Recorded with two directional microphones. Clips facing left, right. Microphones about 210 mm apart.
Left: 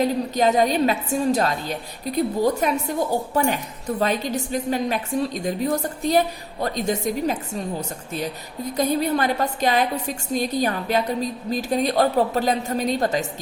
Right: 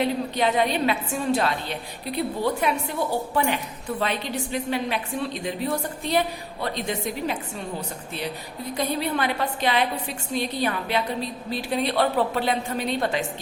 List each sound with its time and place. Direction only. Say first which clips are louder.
0.0 s a woman's voice: left 3 dB; 40° left (ahead or behind)